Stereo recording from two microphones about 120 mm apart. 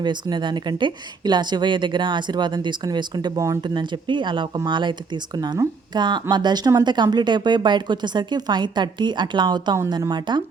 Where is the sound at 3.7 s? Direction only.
40° right (ahead or behind).